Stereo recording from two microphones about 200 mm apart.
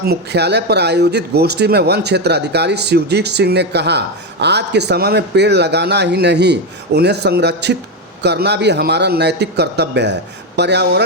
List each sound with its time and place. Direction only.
0.0 s speech: 55° right (ahead or behind)